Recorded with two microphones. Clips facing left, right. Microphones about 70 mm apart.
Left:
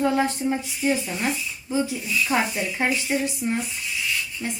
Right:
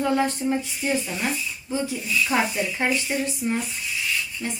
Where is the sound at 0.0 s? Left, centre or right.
Centre.